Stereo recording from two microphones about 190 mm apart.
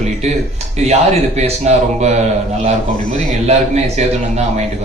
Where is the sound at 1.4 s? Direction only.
35° right (ahead or behind).